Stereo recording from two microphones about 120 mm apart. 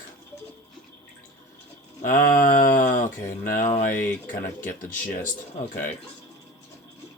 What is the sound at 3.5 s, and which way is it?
Speech, 75° left (ahead or behind).